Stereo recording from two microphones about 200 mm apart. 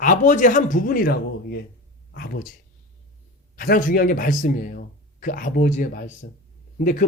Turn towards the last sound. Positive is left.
turn(degrees=45)  # may be behind; listen again after turning